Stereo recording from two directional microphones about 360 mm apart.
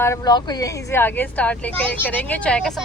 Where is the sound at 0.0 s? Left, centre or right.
Centre.